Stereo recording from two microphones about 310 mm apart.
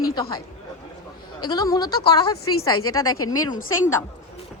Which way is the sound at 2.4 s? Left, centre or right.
Left.